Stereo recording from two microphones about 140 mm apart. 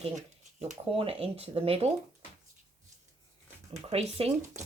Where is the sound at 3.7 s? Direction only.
50° right (ahead or behind).